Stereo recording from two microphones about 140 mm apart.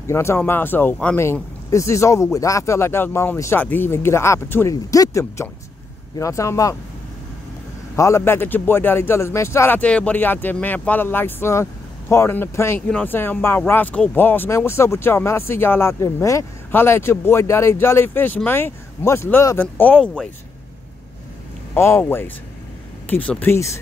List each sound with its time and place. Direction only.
0.1 s speech: 20° left (ahead or behind)
7.9 s speech: 20° left (ahead or behind)
21.7 s speech: 20° left (ahead or behind)